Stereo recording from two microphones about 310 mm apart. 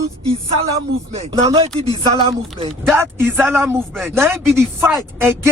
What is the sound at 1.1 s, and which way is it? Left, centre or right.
A man's voice, centre.